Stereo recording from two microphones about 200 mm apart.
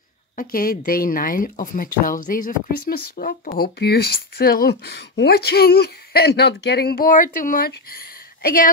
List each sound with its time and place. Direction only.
0.4 s a woman's voice: 45° left (ahead or behind)